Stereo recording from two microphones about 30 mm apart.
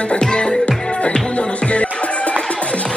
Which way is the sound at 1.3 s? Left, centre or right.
Left.